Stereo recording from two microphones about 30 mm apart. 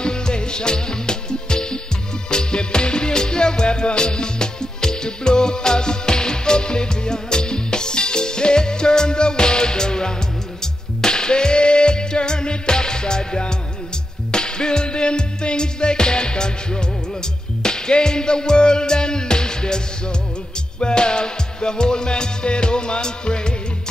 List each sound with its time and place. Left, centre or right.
0.0 s music: left